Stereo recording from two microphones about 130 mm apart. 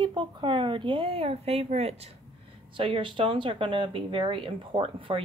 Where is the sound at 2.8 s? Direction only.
40° right (ahead or behind).